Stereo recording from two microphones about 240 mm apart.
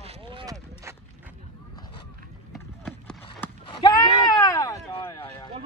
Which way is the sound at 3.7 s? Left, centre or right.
Centre.